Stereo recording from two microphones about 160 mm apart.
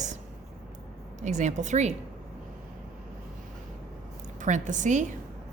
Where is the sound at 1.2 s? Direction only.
50° right (ahead or behind).